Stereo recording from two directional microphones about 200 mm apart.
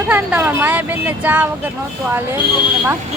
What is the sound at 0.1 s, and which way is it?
Speech, 10° right (ahead or behind).